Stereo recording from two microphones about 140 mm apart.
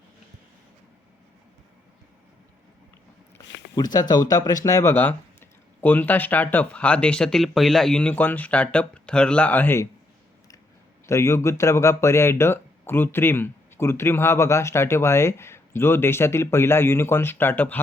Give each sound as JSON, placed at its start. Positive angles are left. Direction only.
{"t": 3.8, "sound": "speech", "side_deg": 30}
{"t": 11.0, "sound": "speech", "side_deg": 20}